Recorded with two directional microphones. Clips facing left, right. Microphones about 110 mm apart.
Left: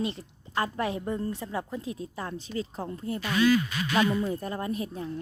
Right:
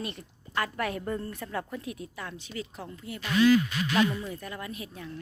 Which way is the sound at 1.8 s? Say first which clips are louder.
Left 3 dB; 30° left (ahead or behind).